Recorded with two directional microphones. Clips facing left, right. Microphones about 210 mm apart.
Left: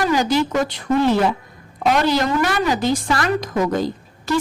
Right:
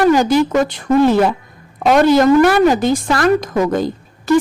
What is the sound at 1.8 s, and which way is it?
A woman's voice, 50° right (ahead or behind).